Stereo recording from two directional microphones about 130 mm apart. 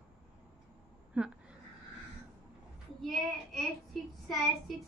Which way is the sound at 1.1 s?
10° right (ahead or behind).